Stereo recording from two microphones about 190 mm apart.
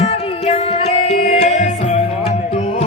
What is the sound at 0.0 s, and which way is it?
Music, 35° left (ahead or behind).